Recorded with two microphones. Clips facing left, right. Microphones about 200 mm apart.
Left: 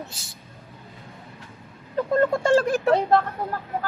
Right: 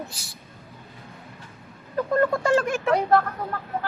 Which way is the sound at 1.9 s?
25° left (ahead or behind).